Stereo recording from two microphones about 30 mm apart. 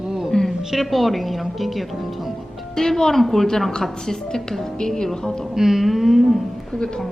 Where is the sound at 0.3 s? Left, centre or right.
Left.